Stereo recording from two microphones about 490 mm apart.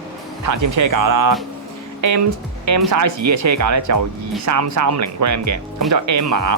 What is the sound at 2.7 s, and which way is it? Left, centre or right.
Speech, right.